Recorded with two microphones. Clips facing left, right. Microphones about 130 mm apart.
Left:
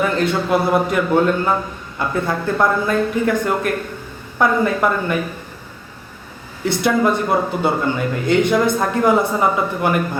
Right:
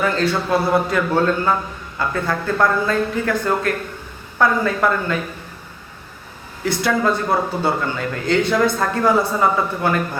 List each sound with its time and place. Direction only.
0.0 s speech: 20° left (ahead or behind)
6.7 s speech: 20° left (ahead or behind)